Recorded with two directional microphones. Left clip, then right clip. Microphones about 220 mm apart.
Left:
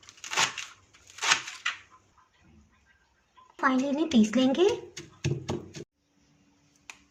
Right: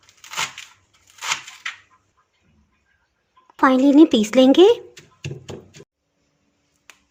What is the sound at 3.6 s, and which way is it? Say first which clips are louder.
Speech: right 13 dB; 45° right (ahead or behind).